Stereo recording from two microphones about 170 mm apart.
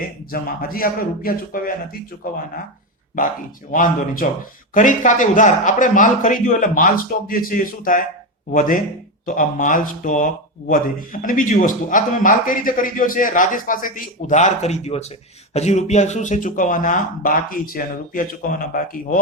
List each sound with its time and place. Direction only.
0.3 s speech: 55° left (ahead or behind)
3.7 s speech: 55° left (ahead or behind)